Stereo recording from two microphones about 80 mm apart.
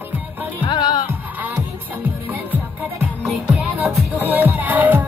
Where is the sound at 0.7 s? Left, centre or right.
Left.